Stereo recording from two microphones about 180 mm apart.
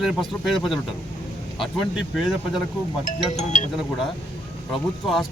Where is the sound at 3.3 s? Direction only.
40° left (ahead or behind).